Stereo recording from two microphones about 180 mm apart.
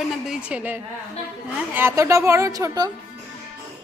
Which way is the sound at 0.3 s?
5° right (ahead or behind).